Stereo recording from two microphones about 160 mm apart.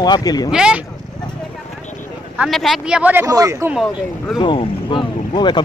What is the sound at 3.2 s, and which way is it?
Speech, 20° right (ahead or behind).